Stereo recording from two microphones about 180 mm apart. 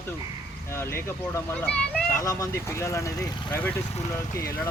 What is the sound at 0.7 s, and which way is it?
Speech, 15° left (ahead or behind).